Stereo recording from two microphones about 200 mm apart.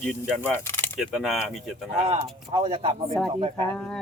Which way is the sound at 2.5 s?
25° right (ahead or behind).